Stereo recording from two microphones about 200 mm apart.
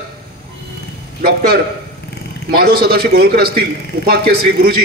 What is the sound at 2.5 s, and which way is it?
A man's voice, 50° right (ahead or behind).